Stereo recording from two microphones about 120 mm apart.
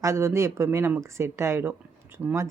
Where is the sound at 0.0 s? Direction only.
25° right (ahead or behind).